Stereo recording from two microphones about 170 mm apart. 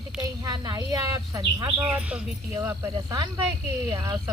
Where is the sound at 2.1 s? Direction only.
10° right (ahead or behind).